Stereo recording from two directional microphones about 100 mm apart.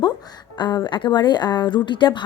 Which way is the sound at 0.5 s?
45° left (ahead or behind).